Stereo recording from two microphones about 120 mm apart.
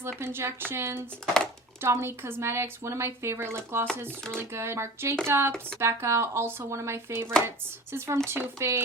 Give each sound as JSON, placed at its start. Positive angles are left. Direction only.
{"t": 0.2, "sound": "speech", "side_deg": -20}